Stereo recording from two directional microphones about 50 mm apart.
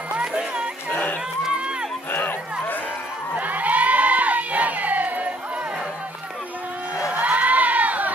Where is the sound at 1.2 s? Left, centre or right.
Centre.